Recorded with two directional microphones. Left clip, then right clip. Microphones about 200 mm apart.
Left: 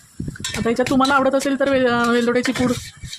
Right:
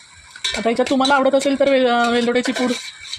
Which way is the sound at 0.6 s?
15° left (ahead or behind).